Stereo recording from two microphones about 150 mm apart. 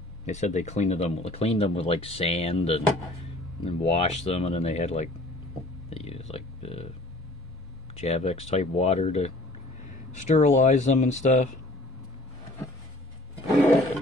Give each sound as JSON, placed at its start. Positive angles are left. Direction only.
{"t": 0.2, "sound": "speech", "side_deg": 50}
{"t": 5.9, "sound": "a sound", "side_deg": 40}
{"t": 7.9, "sound": "speech", "side_deg": 45}